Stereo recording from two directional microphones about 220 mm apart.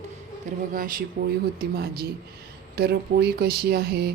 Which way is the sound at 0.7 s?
40° right (ahead or behind).